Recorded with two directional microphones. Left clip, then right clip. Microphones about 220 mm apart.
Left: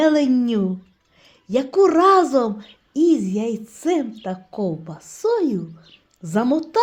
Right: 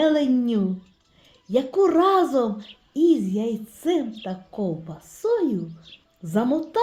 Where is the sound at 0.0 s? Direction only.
25° left (ahead or behind).